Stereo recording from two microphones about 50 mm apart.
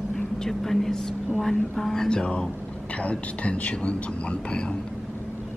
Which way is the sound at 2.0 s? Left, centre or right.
Centre.